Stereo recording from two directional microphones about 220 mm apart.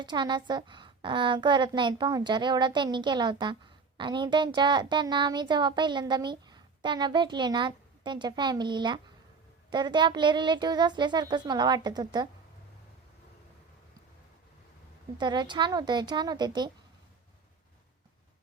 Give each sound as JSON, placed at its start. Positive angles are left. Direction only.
{"t": 0.0, "sound": "a child's voice", "side_deg": -20}
{"t": 15.2, "sound": "a child's voice", "side_deg": -20}